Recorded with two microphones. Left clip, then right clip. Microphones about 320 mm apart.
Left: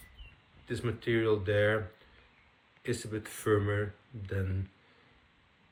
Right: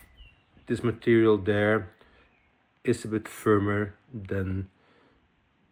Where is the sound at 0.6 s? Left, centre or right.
Centre.